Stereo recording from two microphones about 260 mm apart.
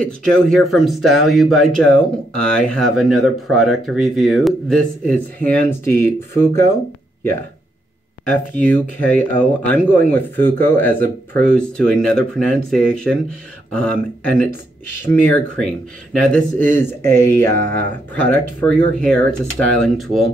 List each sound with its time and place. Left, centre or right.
0.2 s speech: centre
8.3 s speech: centre